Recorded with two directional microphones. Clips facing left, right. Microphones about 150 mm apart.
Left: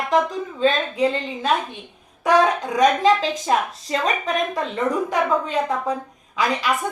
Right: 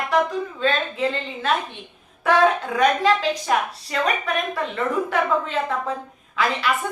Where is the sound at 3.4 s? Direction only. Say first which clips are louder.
Left 1 dB; 20° left (ahead or behind).